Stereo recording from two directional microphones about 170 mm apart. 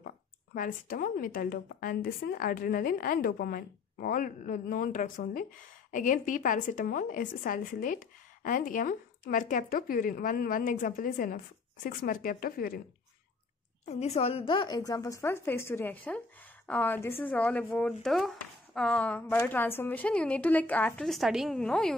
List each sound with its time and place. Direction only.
0.6 s a woman's voice: 55° left (ahead or behind)
13.8 s a woman's voice: 40° left (ahead or behind); by 21.9 s 5° left (ahead or behind)